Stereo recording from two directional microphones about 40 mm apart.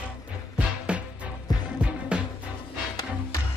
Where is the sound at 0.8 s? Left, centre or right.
Right.